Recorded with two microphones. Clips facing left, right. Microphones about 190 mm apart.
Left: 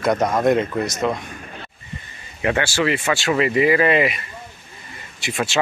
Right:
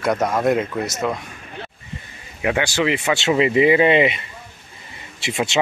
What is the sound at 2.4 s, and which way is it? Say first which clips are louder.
Speech: even; 15° right (ahead or behind).